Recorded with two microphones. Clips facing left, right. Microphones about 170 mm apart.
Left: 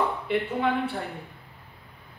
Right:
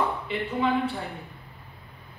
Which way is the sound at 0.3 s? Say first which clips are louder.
Left 4 dB; 60° left (ahead or behind).